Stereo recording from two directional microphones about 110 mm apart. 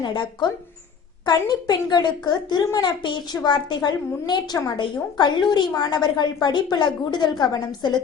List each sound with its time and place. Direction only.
0.0 s a woman's voice: 45° left (ahead or behind)